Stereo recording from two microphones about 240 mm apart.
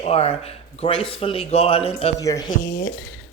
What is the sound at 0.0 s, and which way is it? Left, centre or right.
Speech, left.